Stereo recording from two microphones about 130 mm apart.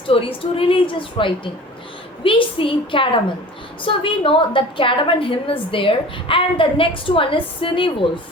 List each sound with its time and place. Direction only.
0.1 s a woman's voice: 45° left (ahead or behind)